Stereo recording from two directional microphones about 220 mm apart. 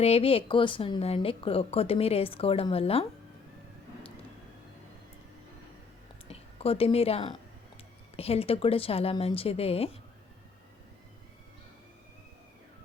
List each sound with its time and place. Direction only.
0.0 s speech: 25° left (ahead or behind)
6.2 s speech: 25° left (ahead or behind)